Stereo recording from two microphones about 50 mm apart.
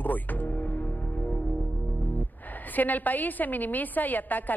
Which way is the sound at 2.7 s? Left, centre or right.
Left.